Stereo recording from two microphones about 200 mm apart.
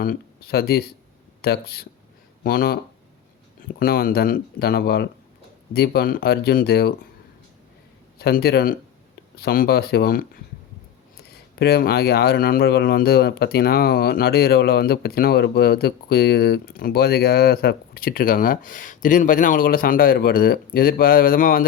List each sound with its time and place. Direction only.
0.0 s speech: 50° left (ahead or behind)
3.8 s speech: 45° left (ahead or behind)
8.2 s speech: 50° left (ahead or behind)